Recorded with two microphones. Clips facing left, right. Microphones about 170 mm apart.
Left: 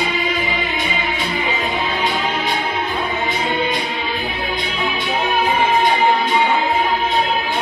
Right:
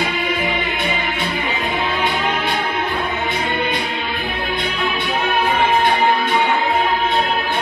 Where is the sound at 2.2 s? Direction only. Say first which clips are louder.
Right 1 dB; 60° right (ahead or behind).